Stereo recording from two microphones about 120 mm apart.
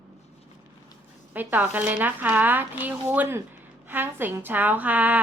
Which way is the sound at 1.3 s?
15° right (ahead or behind).